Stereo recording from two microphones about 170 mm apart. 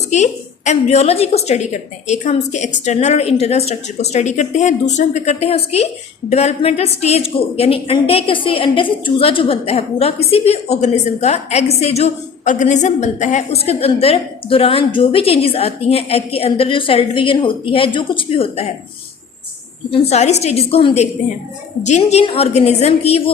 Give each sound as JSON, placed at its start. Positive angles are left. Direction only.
{"t": 0.1, "sound": "a woman's voice", "side_deg": 45}
{"t": 19.9, "sound": "a woman's voice", "side_deg": 40}